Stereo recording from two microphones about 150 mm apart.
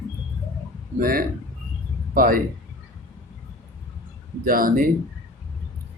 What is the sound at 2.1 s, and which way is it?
Speech, 70° right (ahead or behind).